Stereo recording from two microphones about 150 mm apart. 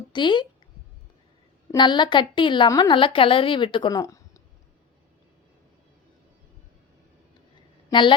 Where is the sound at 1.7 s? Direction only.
30° left (ahead or behind).